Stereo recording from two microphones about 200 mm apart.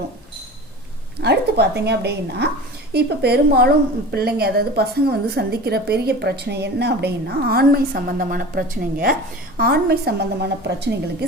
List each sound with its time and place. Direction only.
1.2 s a woman's voice: 55° right (ahead or behind)